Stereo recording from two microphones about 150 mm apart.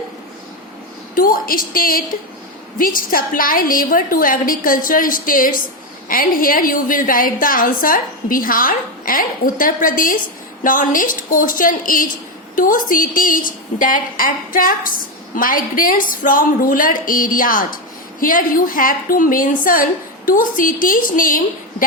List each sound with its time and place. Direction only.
1.1 s a woman's voice: 75° left (ahead or behind)